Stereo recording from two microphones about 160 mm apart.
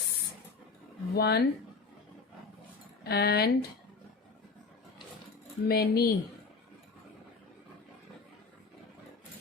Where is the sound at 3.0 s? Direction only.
80° left.